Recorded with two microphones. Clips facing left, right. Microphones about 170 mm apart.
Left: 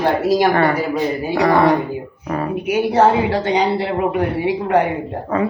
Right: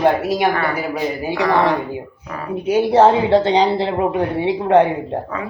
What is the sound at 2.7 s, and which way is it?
Speech, 25° right (ahead or behind).